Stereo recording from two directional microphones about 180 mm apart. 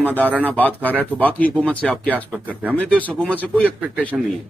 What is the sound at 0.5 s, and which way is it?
A man's voice, 10° left (ahead or behind).